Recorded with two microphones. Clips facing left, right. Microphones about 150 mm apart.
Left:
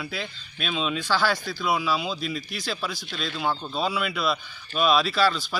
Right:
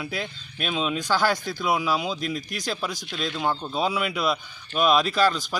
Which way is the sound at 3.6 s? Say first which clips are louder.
Right 2 dB; 20° right (ahead or behind).